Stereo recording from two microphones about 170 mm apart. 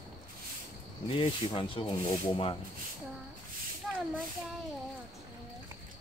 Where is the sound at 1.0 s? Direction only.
30° left (ahead or behind).